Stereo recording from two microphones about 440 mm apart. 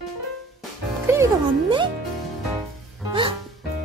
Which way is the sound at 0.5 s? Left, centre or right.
Centre.